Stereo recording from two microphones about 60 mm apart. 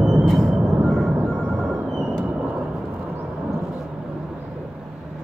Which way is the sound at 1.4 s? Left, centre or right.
Right.